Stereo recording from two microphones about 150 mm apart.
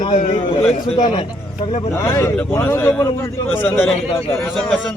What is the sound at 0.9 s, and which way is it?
Speech, 35° left (ahead or behind).